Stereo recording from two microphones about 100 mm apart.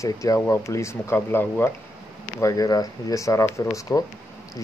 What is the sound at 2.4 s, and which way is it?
Speech, 35° left (ahead or behind).